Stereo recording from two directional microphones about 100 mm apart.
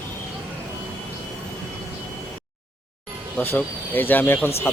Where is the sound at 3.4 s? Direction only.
20° left (ahead or behind).